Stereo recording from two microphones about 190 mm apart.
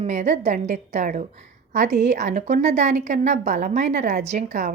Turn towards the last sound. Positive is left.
turn(degrees=-40)  # may be behind; listen again after turning